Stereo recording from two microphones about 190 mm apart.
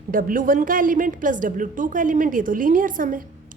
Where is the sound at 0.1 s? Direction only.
45° right (ahead or behind).